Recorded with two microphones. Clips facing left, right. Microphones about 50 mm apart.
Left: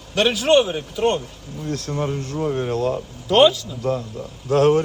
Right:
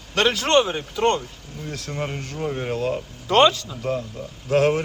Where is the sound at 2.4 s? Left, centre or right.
Centre.